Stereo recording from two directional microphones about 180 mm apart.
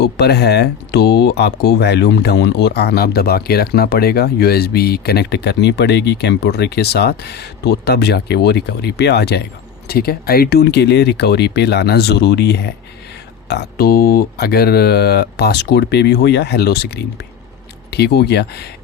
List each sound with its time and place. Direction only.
0.0 s speech: 65° left (ahead or behind)